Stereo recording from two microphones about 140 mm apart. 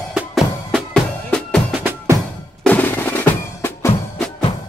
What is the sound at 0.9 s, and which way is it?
Music, 5° left (ahead or behind).